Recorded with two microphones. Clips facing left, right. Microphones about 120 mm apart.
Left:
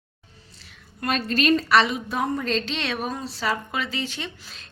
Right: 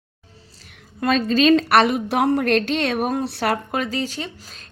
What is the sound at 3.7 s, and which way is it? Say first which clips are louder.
Speech: right 5 dB; 40° right (ahead or behind).